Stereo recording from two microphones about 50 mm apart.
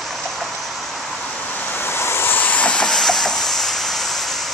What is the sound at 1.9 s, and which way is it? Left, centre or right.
Vehicle, left.